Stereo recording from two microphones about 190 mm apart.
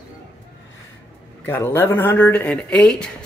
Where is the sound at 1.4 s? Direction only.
10° left (ahead or behind).